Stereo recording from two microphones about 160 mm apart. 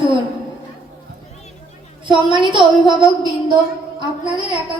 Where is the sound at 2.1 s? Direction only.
30° right (ahead or behind).